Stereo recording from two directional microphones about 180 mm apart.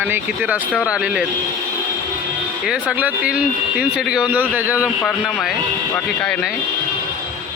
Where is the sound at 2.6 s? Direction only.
5° right (ahead or behind).